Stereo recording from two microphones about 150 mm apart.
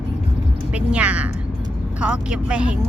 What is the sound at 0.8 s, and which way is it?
Speech, 10° right (ahead or behind).